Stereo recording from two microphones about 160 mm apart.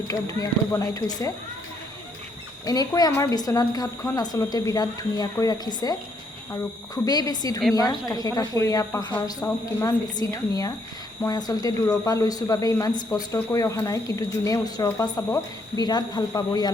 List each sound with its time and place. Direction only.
0.1 s speech: 20° left (ahead or behind)
2.6 s speech: 25° left (ahead or behind)